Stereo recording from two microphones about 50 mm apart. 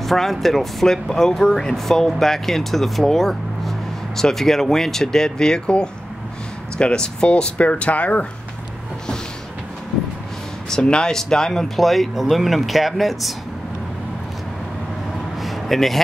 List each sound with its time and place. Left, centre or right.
0.0 s speech: centre; by 8.3 s left
10.7 s speech: centre
15.3 s a sound: centre